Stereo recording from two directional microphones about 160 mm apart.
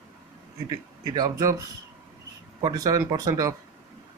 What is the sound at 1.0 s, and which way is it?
Speech, 20° right (ahead or behind).